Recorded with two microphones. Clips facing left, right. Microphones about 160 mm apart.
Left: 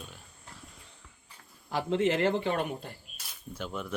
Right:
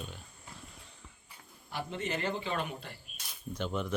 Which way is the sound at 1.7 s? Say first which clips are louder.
Left 9 dB; 90° left.